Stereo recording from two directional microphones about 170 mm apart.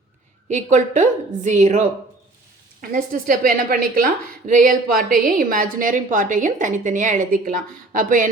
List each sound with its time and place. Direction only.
0.4 s a woman's voice: 45° right (ahead or behind)
2.9 s a woman's voice: 55° right (ahead or behind)